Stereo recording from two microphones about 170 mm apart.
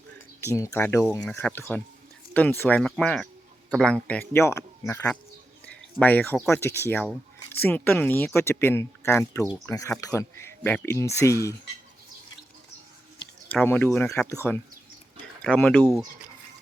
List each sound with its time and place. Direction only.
0.4 s speech: 15° left (ahead or behind)
5.6 s a sound: 10° left (ahead or behind)
6.5 s speech: 15° left (ahead or behind)
13.5 s speech: 10° left (ahead or behind)